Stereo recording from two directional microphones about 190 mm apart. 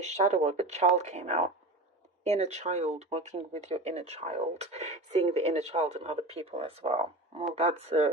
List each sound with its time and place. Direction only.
0.0 s speech: 35° right (ahead or behind)